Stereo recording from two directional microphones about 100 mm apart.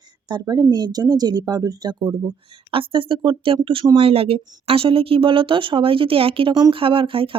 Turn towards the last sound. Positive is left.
turn(degrees=-65)  # may be behind; listen again after turning